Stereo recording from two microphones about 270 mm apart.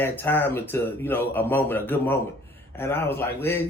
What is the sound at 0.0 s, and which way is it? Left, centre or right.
Speech, centre.